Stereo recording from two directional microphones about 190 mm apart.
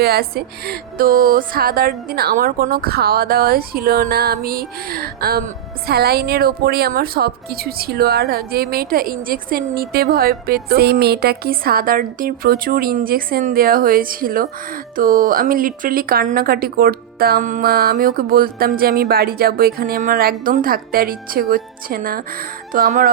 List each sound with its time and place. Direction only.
0.0 s a woman's voice: 55° right (ahead or behind)